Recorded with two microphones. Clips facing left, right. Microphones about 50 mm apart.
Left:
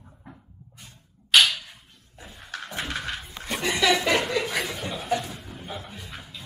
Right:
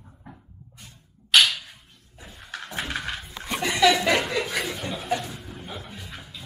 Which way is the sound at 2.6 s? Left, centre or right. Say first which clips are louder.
Right 1 dB; centre.